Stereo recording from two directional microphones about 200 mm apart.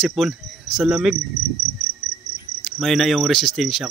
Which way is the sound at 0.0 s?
Centre (ahead or behind).